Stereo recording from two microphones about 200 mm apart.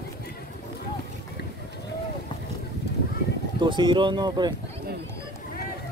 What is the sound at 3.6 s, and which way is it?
Speech, 25° right (ahead or behind).